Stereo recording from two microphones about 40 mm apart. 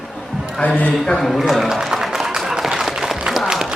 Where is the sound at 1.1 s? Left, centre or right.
Centre.